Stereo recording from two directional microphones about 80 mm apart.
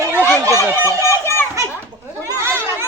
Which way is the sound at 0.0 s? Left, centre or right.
Right.